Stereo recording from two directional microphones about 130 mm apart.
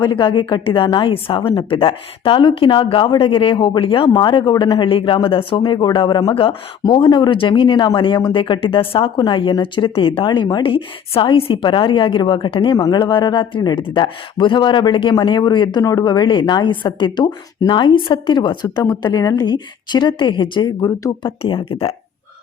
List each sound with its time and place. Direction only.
0.0 s speech: 35° left (ahead or behind)
21.4 s speech: 45° left (ahead or behind)